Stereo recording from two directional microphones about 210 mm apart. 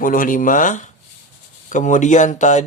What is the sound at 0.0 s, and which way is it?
Speech, 40° left (ahead or behind).